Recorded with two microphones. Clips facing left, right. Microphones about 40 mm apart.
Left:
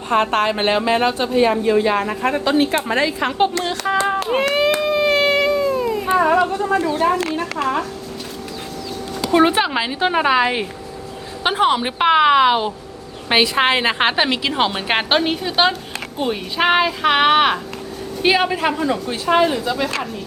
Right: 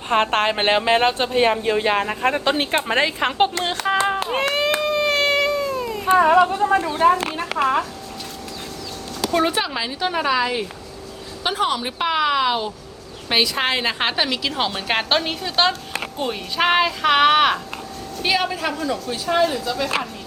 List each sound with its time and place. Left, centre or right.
0.1 s a woman's voice: right
4.8 s a sound: centre
6.1 s a woman's voice: right
7.6 s speech: centre
9.2 s a woman's voice: left